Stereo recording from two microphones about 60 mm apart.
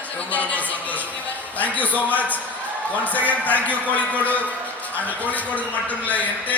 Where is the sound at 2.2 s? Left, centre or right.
Left.